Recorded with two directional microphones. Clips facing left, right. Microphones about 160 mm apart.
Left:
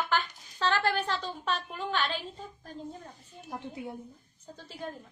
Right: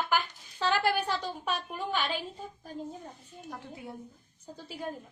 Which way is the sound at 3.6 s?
20° left (ahead or behind).